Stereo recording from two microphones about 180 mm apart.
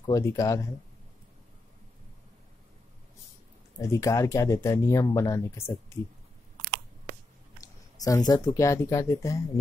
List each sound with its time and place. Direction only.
0.0 s speech: 20° left (ahead or behind)
3.7 s speech: 15° left (ahead or behind)
7.6 s speech: 20° left (ahead or behind)